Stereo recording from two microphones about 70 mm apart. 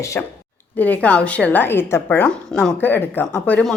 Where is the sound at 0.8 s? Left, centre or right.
Left.